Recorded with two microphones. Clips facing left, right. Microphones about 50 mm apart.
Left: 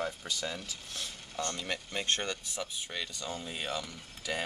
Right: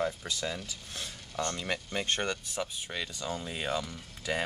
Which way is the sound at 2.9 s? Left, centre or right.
Centre.